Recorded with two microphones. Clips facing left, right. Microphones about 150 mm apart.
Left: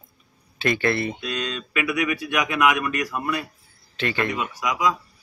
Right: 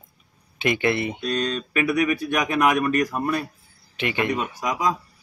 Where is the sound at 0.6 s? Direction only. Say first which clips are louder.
Even; 20° right (ahead or behind).